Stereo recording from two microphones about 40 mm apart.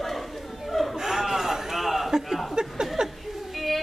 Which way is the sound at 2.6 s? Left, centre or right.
Centre.